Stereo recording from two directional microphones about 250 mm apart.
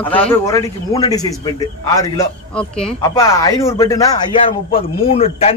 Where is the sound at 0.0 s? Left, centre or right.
Centre.